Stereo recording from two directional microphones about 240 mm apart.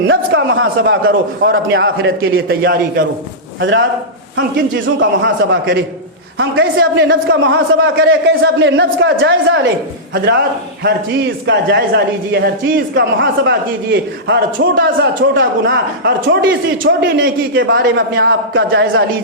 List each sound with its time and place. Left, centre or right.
0.1 s a man's voice: right
10.8 s a man's voice: right